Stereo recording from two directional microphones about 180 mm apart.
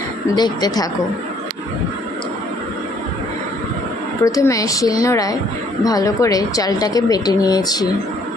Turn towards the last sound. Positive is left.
turn(degrees=20)  # may be behind; listen again after turning